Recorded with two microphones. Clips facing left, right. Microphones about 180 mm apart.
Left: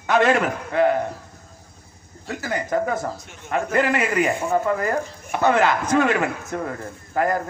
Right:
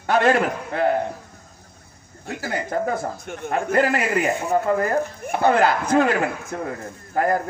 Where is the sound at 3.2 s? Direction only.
55° right (ahead or behind).